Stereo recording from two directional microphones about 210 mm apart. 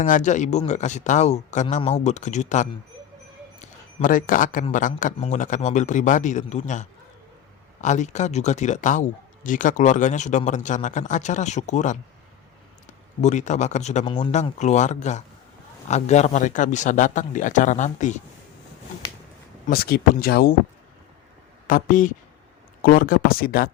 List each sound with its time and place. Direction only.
0.0 s a man's voice: 35° left (ahead or behind)
13.2 s speech: 35° left (ahead or behind)
14.0 s speech: 20° left (ahead or behind)
14.4 s speech: 35° left (ahead or behind)
19.6 s speech: 45° left (ahead or behind)
21.7 s speech: 40° left (ahead or behind)